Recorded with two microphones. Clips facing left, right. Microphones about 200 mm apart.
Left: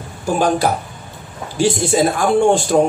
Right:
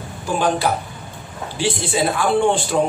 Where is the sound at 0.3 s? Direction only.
40° left (ahead or behind).